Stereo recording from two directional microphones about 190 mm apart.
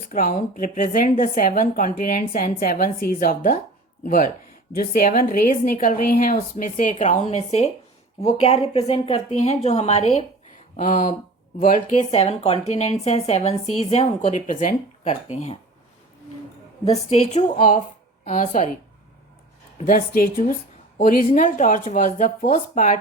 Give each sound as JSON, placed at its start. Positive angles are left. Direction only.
{"t": 0.1, "sound": "a woman's voice", "side_deg": 45}
{"t": 16.8, "sound": "a woman's voice", "side_deg": 35}
{"t": 19.8, "sound": "a woman's voice", "side_deg": 45}